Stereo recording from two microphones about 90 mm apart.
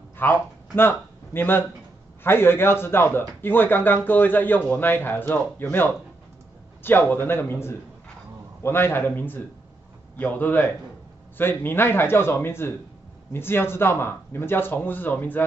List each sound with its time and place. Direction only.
0.2 s a man's voice: 25° left (ahead or behind)